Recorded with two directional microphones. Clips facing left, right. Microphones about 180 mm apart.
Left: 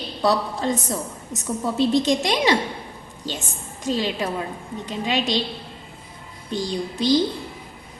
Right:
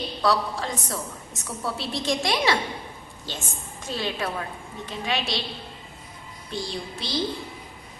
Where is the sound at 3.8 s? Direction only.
15° left (ahead or behind).